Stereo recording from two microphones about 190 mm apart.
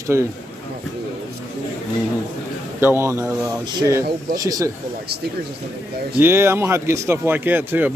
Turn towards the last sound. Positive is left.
turn(degrees=-10)  # may be behind; listen again after turning